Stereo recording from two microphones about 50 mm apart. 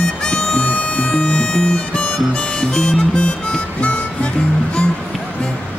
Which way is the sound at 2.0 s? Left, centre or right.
Left.